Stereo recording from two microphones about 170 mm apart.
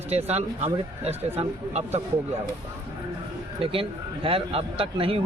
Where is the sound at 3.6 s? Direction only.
30° right (ahead or behind).